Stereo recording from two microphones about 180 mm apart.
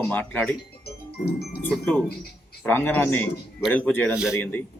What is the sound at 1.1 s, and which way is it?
Speech, 60° left (ahead or behind).